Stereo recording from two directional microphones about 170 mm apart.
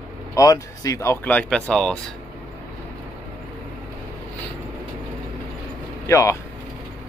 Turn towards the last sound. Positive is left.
turn(degrees=20)  # may be behind; listen again after turning